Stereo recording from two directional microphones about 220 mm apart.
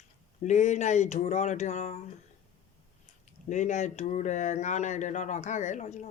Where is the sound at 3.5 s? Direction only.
35° left (ahead or behind).